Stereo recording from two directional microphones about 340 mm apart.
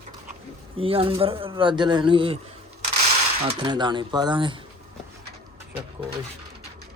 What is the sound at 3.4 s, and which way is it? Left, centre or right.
Speech, centre.